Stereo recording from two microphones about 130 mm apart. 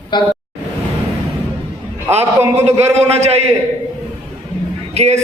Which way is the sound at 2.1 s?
20° right (ahead or behind).